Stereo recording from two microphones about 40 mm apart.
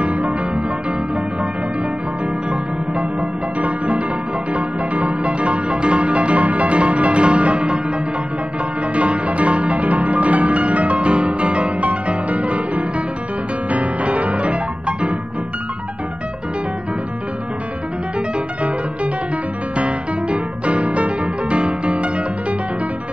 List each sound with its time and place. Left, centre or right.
0.0 s music: right
2.5 s music: right
8.9 s music: right
19.8 s music: right